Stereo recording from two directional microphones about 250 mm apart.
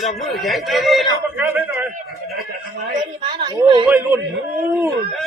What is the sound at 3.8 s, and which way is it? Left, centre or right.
Speech, centre.